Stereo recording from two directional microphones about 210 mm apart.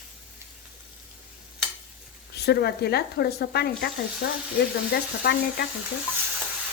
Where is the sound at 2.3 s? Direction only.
50° left (ahead or behind).